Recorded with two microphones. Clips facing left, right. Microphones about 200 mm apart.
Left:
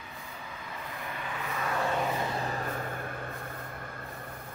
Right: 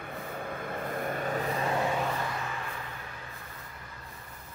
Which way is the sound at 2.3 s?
35° left (ahead or behind).